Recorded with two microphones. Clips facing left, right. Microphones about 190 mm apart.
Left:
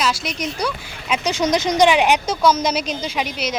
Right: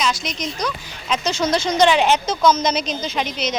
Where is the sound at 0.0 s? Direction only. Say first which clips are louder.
Left 1 dB; 10° left (ahead or behind).